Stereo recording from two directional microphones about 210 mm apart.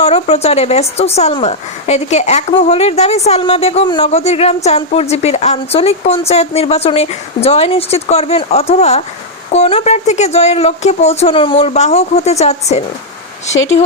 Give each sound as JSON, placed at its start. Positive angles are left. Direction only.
{"t": 0.0, "sound": "speech", "side_deg": 30}